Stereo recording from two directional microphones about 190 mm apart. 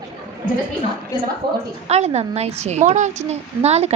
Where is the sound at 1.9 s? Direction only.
35° right (ahead or behind).